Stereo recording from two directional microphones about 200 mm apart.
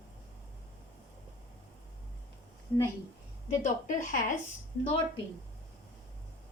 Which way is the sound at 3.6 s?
40° left (ahead or behind).